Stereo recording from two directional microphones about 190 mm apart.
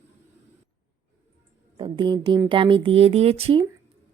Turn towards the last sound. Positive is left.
turn(degrees=-30)  # may be behind; listen again after turning